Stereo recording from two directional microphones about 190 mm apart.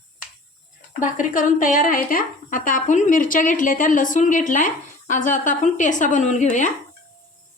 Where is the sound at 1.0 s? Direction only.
45° left (ahead or behind).